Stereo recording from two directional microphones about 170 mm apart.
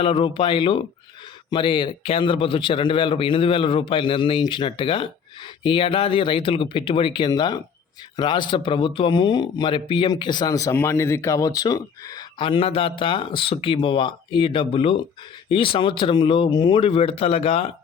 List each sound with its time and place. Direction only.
0.0 s a man's voice: 30° left (ahead or behind)